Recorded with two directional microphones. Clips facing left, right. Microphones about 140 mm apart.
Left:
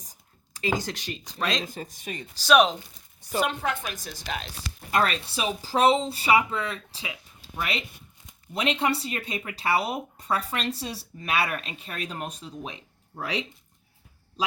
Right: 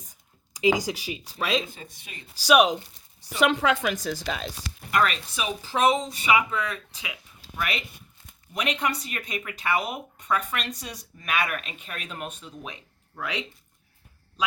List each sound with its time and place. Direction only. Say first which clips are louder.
0.8 s speech: right 3 dB; 10° right (ahead or behind)
1.6 s speech: left 7 dB; 40° left (ahead or behind)
2.3 s speech: right 1 dB; 10° right (ahead or behind)
3.2 s a woman's voice: right 4 dB; 90° right
4.9 s speech: even; 30° left (ahead or behind)